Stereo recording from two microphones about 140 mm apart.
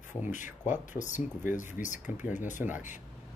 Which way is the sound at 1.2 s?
15° right (ahead or behind).